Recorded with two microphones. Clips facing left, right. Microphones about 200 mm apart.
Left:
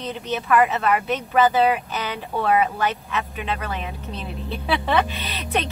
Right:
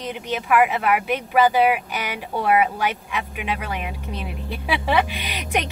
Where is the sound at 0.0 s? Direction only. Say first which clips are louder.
Even; 10° right (ahead or behind).